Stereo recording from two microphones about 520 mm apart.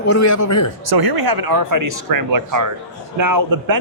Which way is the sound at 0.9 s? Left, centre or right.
Right.